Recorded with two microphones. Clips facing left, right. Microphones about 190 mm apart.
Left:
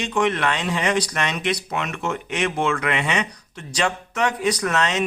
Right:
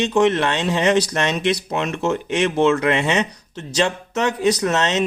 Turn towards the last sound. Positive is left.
turn(degrees=-25)  # may be behind; listen again after turning